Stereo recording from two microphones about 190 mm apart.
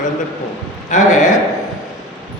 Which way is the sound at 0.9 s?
40° left (ahead or behind).